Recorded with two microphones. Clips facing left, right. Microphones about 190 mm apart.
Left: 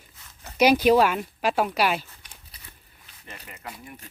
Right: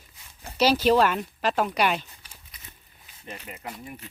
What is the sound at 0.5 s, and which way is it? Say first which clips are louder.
Speech: left 2 dB; 15° left (ahead or behind).